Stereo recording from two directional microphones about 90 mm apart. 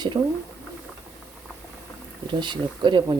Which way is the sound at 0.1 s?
45° right (ahead or behind).